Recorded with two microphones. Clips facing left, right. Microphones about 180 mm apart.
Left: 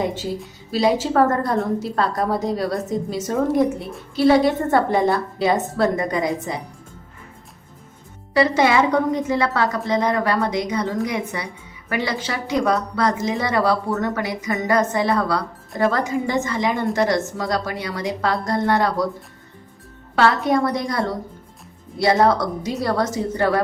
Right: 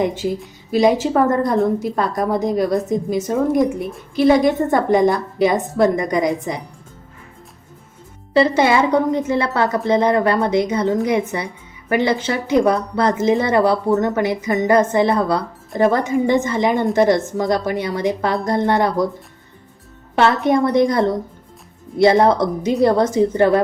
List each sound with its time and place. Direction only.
0.7 s a woman's voice: 15° right (ahead or behind)
8.3 s speech: 25° right (ahead or behind)
20.1 s speech: 20° right (ahead or behind)